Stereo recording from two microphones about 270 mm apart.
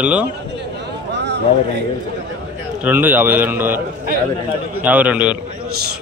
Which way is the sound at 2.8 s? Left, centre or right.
Centre.